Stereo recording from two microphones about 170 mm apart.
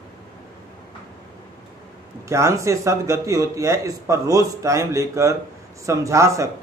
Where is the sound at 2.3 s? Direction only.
15° right (ahead or behind).